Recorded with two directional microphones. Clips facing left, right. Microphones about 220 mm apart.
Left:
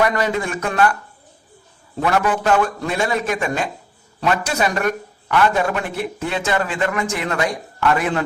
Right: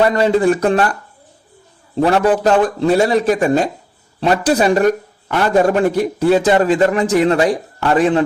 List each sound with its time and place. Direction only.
0.0 s speech: 30° right (ahead or behind)
2.0 s speech: 35° right (ahead or behind)